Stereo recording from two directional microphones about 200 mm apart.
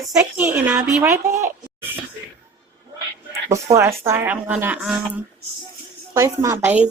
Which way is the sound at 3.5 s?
15° right (ahead or behind).